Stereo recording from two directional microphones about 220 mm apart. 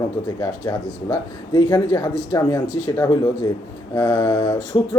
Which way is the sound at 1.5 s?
15° left (ahead or behind).